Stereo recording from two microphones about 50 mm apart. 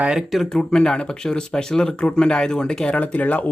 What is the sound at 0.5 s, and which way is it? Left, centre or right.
Speech, centre.